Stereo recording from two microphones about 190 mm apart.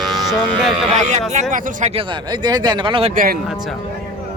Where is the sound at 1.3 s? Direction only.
40° right (ahead or behind).